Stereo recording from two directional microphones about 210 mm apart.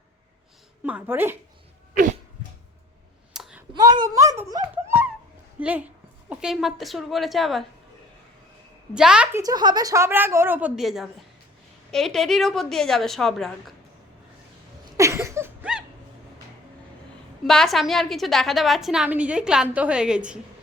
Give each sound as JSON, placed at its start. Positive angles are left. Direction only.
{"t": 0.9, "sound": "a woman's voice", "side_deg": -10}
{"t": 3.3, "sound": "clicking", "side_deg": 0}
{"t": 3.7, "sound": "a sound", "side_deg": -20}
{"t": 5.5, "sound": "a woman's voice", "side_deg": -5}
{"t": 9.0, "sound": "a woman's voice", "side_deg": -5}
{"t": 9.4, "sound": "a woman's voice", "side_deg": -20}
{"t": 14.9, "sound": "a sound", "side_deg": -15}
{"t": 17.4, "sound": "a woman's voice", "side_deg": 0}